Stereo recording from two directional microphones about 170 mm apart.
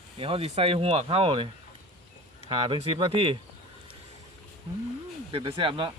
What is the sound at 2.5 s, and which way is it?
Speech, 35° right (ahead or behind).